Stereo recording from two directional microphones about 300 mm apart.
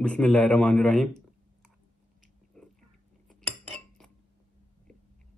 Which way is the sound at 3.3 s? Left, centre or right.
Centre.